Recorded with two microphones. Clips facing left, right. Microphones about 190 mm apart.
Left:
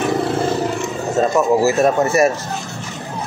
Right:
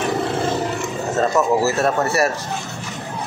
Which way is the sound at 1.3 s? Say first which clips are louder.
Left 4 dB; 15° left (ahead or behind).